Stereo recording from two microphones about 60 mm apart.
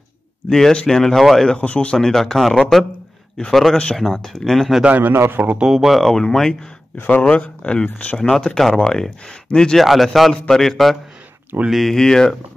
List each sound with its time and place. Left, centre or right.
0.5 s speech: centre
1.6 s speech: left
2.0 s speech: centre
3.7 s speech: centre
4.8 s a man's voice: right
5.1 s a man's voice: right
5.7 s speech: centre
6.0 s speech: centre
7.0 s speech: left
8.2 s speech: centre
9.8 s speech: centre